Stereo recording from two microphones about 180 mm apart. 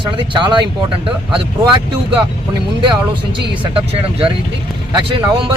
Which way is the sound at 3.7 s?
30° right (ahead or behind).